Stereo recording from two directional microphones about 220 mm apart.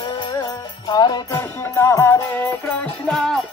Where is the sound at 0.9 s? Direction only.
20° left (ahead or behind); by 3.4 s centre (ahead or behind).